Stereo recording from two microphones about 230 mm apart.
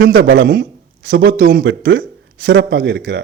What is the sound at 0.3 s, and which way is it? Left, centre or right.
Speech, right.